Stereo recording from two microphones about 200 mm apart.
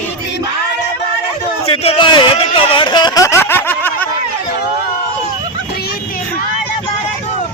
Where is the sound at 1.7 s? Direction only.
25° left (ahead or behind); by 4.1 s 10° left (ahead or behind).